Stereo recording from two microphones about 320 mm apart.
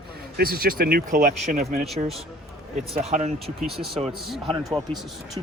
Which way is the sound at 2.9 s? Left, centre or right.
Centre.